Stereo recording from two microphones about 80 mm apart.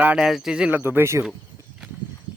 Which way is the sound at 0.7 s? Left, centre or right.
Right.